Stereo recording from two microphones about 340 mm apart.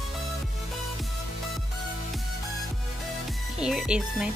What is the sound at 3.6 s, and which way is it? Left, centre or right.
Speech, centre.